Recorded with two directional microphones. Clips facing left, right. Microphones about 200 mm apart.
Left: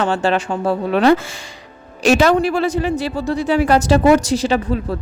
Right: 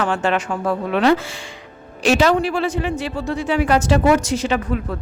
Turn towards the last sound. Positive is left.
turn(degrees=35)  # may be behind; listen again after turning